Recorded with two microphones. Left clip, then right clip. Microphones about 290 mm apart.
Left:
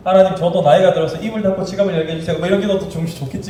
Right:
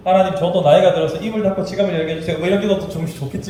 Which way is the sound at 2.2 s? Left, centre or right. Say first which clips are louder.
Left 2 dB; centre.